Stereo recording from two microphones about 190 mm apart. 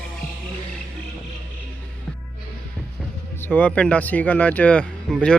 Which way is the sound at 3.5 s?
5° left (ahead or behind).